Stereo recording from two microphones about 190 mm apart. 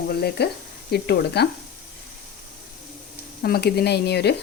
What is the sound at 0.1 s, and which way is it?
Speech, 55° left (ahead or behind).